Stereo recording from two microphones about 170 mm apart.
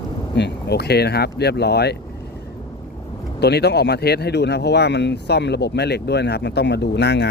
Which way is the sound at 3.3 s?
75° left (ahead or behind).